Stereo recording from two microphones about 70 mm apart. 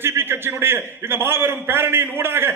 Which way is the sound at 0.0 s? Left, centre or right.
Right.